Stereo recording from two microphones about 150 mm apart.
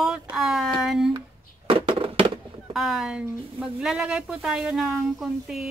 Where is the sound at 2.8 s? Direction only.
5° right (ahead or behind).